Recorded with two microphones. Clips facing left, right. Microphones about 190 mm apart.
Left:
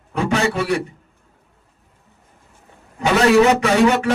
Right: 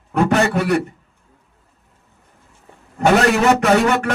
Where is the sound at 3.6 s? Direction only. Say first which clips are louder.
Even; 50° right (ahead or behind).